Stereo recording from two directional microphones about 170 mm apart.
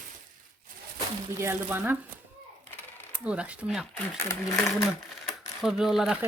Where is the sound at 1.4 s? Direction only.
15° right (ahead or behind).